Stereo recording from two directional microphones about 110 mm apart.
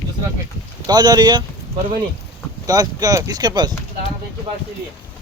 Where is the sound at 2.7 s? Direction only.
30° right (ahead or behind).